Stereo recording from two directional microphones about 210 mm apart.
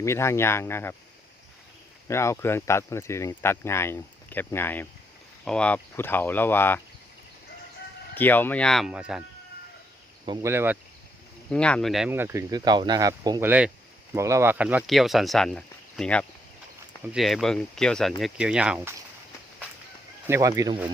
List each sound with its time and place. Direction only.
0.0 s speech: 10° left (ahead or behind)
2.0 s speech: 15° left (ahead or behind)
8.1 s speech: 10° left (ahead or behind)
10.2 s speech: 10° right (ahead or behind)
11.5 s speech: 5° left (ahead or behind)
20.2 s speech: 15° right (ahead or behind)